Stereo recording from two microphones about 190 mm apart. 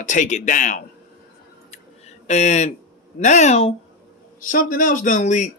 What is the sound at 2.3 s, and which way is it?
A man's voice, 35° left (ahead or behind).